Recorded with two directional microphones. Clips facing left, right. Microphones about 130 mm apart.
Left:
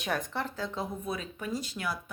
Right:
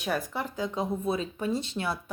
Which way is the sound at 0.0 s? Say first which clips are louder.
Right 2 dB; 5° right (ahead or behind).